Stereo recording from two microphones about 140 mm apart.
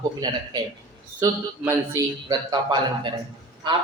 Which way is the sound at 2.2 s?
30° right (ahead or behind).